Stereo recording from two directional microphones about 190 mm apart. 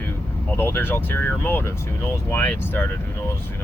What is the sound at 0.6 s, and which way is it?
Speech, 10° left (ahead or behind).